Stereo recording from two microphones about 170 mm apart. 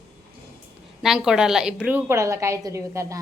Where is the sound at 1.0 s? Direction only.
5° right (ahead or behind).